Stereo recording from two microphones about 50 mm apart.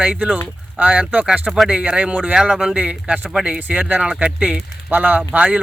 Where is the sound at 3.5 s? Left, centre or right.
Right.